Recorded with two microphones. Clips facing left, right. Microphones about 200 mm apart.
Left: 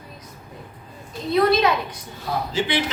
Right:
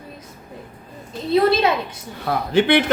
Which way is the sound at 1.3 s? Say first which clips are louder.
Right 2 dB; 30° right (ahead or behind).